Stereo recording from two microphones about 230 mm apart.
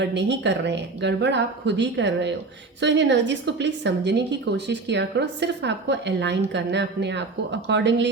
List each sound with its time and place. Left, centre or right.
0.0 s a woman's voice: right